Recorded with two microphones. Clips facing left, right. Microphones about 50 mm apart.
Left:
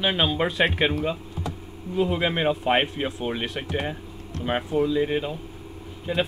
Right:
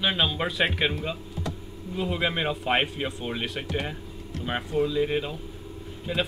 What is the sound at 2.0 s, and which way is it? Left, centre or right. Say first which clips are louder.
Speech: left 4 dB; centre.